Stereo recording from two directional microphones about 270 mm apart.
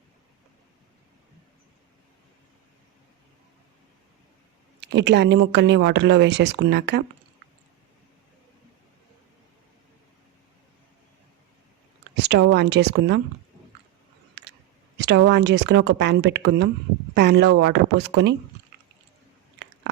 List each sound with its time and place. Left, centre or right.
4.8 s speech: right
12.1 s speech: right
14.4 s a sound: right
14.9 s speech: right